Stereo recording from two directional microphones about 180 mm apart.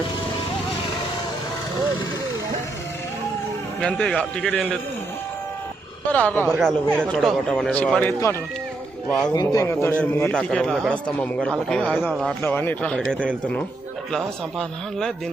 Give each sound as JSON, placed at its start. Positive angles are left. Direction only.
{"t": 3.8, "sound": "a man's voice", "side_deg": 5}
{"t": 6.1, "sound": "a man's voice", "side_deg": 10}